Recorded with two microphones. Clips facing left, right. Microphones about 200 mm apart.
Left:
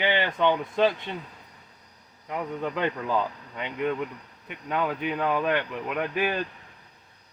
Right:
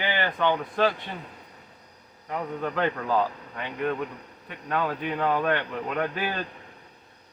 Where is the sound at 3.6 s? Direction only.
20° left (ahead or behind).